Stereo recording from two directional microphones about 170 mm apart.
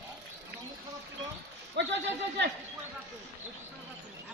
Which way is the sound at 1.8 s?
90° right.